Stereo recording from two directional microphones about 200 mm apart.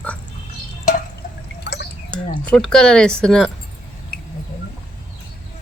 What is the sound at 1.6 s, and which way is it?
Drip, 55° left (ahead or behind).